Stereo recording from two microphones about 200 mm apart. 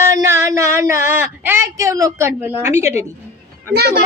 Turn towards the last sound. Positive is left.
turn(degrees=-55)  # may be behind; listen again after turning